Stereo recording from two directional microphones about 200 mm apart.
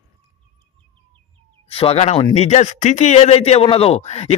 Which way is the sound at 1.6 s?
30° left (ahead or behind).